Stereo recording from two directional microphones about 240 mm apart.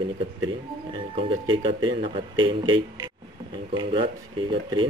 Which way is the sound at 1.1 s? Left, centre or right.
Right.